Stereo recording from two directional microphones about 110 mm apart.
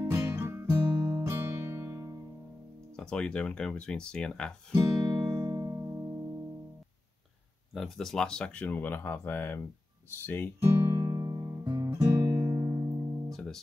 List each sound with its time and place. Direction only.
0.1 s music: 20° right (ahead or behind)
3.0 s speech: 10° left (ahead or behind)
4.7 s music: 35° right (ahead or behind)
7.7 s speech: centre (ahead or behind); by 10.5 s 20° left (ahead or behind)
10.6 s music: 25° right (ahead or behind)
11.8 s guitar: 25° right (ahead or behind)
13.3 s music: 5° left (ahead or behind)